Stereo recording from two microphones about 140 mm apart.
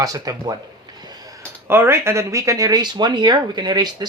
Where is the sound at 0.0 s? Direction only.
25° right (ahead or behind).